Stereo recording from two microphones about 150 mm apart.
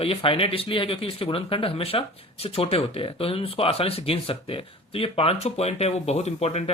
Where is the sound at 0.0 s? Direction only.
40° left (ahead or behind).